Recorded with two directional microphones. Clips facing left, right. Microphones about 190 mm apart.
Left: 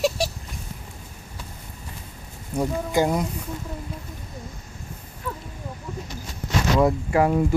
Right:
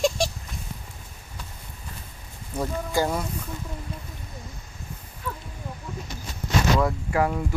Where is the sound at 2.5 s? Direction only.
15° left (ahead or behind).